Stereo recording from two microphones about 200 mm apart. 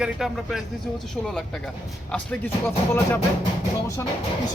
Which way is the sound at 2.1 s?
5° left (ahead or behind).